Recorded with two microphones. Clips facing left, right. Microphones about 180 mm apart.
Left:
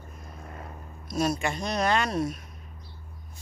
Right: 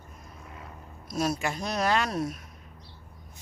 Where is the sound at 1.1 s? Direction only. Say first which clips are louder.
Left 2 dB; centre (ahead or behind).